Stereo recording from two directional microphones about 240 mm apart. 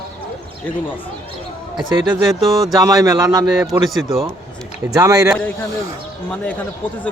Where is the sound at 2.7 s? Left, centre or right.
Centre.